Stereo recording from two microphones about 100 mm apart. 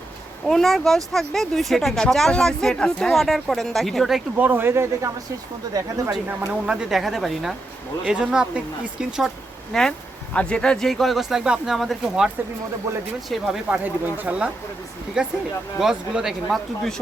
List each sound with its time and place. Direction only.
0.4 s speech: centre (ahead or behind)
4.4 s speech: 20° right (ahead or behind)
5.7 s speech: 40° right (ahead or behind)
6.5 s speech: 10° right (ahead or behind)
13.7 s speech: 15° right (ahead or behind)